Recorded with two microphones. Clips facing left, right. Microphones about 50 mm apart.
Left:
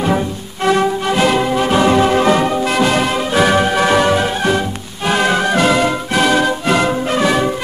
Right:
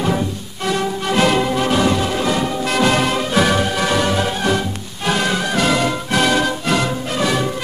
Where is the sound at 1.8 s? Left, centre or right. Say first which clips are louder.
Left 5 dB; left.